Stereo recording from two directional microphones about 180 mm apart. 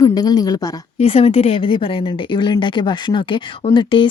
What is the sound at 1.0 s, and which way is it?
Speech, 35° left (ahead or behind).